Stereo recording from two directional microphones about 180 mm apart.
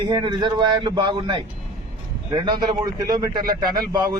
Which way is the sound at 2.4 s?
25° right (ahead or behind).